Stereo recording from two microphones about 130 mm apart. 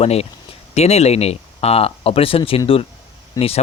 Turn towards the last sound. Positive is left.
turn(degrees=50)  # may be behind; listen again after turning